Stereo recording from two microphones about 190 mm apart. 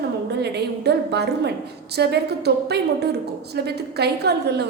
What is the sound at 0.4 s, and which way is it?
A woman's voice, 60° right (ahead or behind).